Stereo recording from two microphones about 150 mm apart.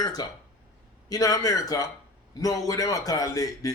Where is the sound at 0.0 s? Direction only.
25° left (ahead or behind).